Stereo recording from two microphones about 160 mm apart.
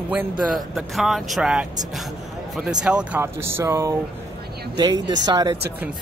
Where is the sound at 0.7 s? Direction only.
Centre (ahead or behind); by 5.6 s 25° right (ahead or behind).